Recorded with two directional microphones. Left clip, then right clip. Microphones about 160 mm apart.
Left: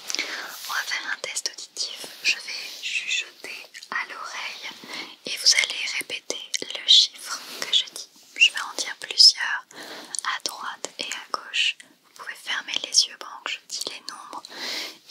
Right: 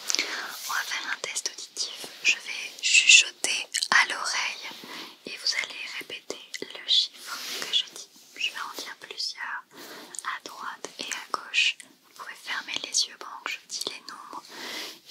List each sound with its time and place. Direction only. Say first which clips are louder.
0.1 s whispering: even; 5° right (ahead or behind)
2.8 s whispering: right 11 dB; 30° right (ahead or behind)
3.3 s whispering: right 8 dB; 60° right (ahead or behind)
4.3 s whispering: right 4 dB; 25° right (ahead or behind)
4.8 s whispering: left 6 dB; 20° left (ahead or behind)
8.4 s whispering: left 11 dB; 25° left (ahead or behind)
11.0 s whispering: left 1 dB; centre (ahead or behind)
12.2 s whispering: left 4 dB; 10° left (ahead or behind)